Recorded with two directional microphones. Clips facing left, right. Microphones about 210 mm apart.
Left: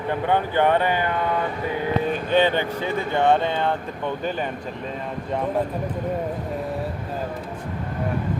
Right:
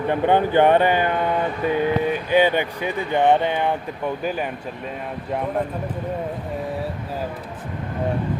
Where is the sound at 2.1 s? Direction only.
10° right (ahead or behind).